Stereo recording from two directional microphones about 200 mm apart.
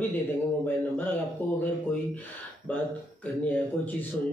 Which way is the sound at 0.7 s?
10° left (ahead or behind).